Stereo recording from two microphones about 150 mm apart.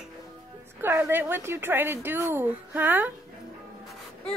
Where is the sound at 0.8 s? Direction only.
15° right (ahead or behind).